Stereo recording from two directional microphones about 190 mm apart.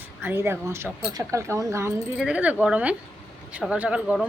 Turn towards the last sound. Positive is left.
turn(degrees=-5)  # may be behind; listen again after turning